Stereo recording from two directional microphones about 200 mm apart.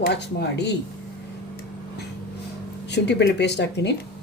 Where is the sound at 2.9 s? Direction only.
60° left (ahead or behind).